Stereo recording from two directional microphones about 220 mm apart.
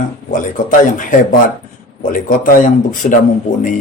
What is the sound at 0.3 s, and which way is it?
Speech, 35° left (ahead or behind).